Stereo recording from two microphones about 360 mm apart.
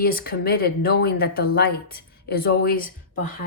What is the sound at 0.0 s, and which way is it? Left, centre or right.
Speech, left.